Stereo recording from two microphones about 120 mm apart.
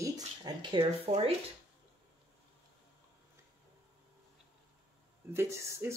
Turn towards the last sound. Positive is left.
turn(degrees=-25)  # may be behind; listen again after turning